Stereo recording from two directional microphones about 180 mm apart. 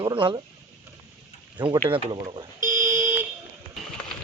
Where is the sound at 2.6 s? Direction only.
15° right (ahead or behind).